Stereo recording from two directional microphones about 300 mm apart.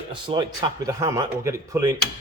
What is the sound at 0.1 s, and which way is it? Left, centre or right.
Speech, centre.